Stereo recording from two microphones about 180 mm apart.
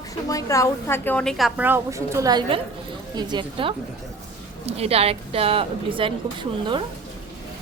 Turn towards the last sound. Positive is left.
turn(degrees=-25)  # may be behind; listen again after turning